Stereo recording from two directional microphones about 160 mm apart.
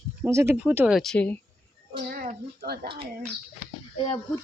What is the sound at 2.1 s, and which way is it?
Speech, 60° right (ahead or behind).